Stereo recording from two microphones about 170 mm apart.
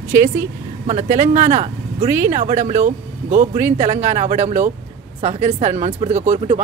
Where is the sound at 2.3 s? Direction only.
45° right (ahead or behind).